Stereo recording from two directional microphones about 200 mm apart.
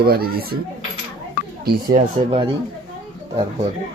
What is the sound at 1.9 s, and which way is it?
Speech, 30° right (ahead or behind).